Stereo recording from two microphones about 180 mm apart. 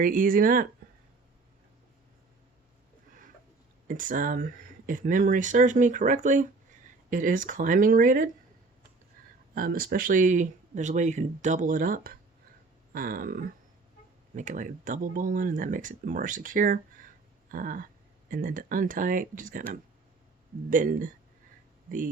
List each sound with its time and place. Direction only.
0.0 s speech: 50° right (ahead or behind)
3.8 s speech: 50° right (ahead or behind)
9.6 s speech: 55° right (ahead or behind)
20.7 s speech: 50° right (ahead or behind)